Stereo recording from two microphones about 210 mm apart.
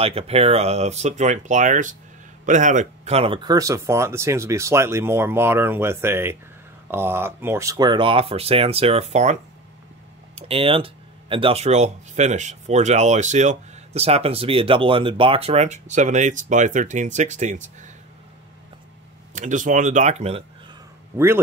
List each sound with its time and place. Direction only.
0.0 s speech: 30° right (ahead or behind)
19.3 s speech: 35° right (ahead or behind)